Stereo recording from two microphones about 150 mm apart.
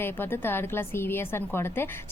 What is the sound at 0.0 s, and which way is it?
A woman's voice, 15° left (ahead or behind).